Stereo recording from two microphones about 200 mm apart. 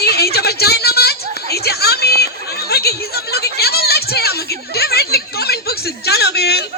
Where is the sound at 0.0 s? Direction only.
50° left (ahead or behind).